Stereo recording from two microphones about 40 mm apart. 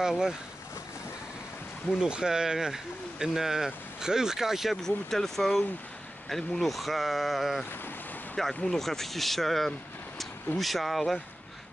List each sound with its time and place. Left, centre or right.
0.0 s speech: centre
2.0 s speech: right
4.8 s speech: centre
8.6 s speech: centre